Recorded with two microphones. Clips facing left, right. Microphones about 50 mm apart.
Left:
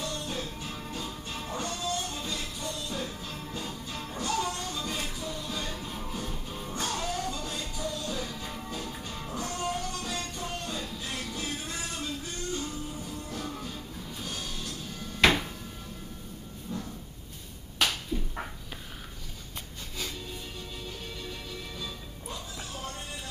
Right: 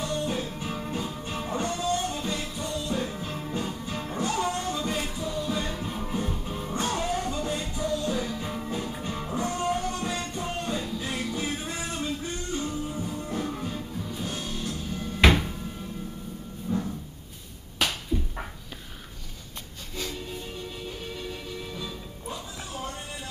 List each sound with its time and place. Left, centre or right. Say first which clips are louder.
0.0 s music: right 6 dB; centre
4.9 s music: right 5 dB; centre
15.2 s cupboard open or close: right 2 dB; centre
16.7 s drawer open or close: right 8 dB; centre
17.7 s a sound: right 1 dB; centre
21.2 s music: right 4 dB; centre